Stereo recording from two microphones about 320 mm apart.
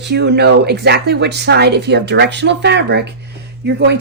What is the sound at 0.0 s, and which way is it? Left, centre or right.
Speech, right.